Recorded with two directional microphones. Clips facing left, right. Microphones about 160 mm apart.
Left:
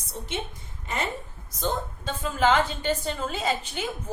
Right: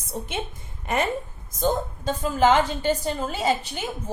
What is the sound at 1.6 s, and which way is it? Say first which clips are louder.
A woman's voice: right 5 dB; 40° right (ahead or behind).